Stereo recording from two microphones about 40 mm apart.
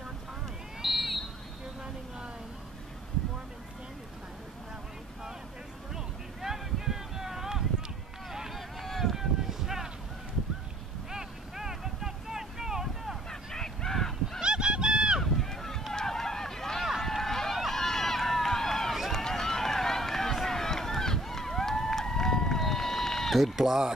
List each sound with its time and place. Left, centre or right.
0.8 s a sound: centre
5.9 s a sound: centre
8.3 s vehicle: centre
9.1 s a sound: centre
11.1 s vehicle: centre
13.3 s honk: centre
14.4 s goose: right
15.4 s run: centre
15.9 s vehicle: centre
17.0 s run: centre
23.3 s speech: centre